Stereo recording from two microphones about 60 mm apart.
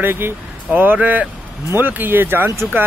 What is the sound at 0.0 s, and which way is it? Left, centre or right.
Speech, right.